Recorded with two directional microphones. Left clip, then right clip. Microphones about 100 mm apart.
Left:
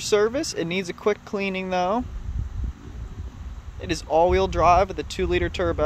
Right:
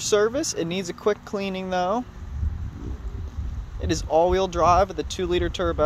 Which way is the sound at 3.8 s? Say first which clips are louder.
Even; 55° left (ahead or behind).